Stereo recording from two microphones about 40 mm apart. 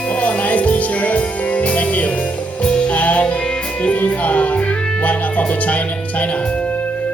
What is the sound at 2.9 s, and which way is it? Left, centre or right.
Music, left.